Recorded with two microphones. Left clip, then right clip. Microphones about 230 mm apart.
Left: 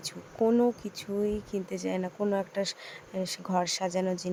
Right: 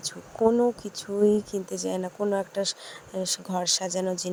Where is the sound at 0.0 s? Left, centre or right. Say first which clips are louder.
Right 4 dB; right.